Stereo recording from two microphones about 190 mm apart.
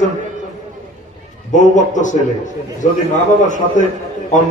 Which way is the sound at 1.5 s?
40° left (ahead or behind).